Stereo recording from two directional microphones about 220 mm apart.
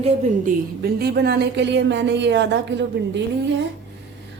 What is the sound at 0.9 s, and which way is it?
Speech, 45° right (ahead or behind).